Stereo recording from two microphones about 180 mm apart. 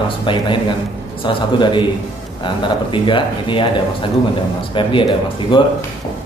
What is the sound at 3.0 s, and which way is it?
Speech, 25° left (ahead or behind).